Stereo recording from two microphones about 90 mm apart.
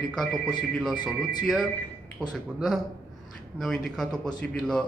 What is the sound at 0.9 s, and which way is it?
Speech, 50° left (ahead or behind).